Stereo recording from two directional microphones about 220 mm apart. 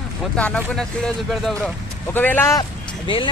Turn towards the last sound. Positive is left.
turn(degrees=25)  # may be behind; listen again after turning